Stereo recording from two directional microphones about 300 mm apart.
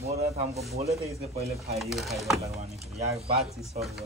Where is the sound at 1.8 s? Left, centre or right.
Centre.